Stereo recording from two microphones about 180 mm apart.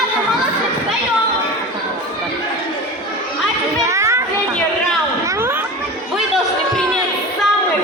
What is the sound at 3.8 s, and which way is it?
Children playing, 15° right (ahead or behind).